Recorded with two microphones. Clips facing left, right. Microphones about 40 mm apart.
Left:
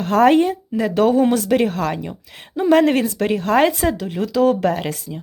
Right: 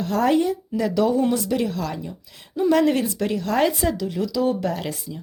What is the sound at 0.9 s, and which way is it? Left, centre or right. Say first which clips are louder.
Speech: left 5 dB; left.